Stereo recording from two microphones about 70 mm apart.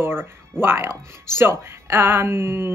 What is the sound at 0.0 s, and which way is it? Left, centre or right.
Speech, right.